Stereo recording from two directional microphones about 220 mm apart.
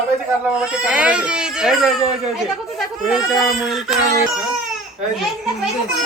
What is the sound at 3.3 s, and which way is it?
Speech, centre (ahead or behind).